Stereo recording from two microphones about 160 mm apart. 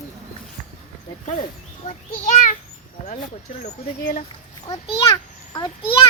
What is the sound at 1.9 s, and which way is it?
Speech, 50° left (ahead or behind).